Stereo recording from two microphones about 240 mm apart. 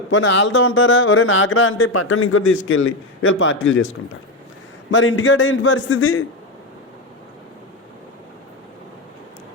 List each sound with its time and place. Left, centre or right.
0.1 s speech: left
4.9 s speech: left